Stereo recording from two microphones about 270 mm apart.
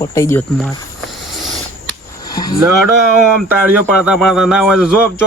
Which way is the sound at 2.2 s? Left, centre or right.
Centre.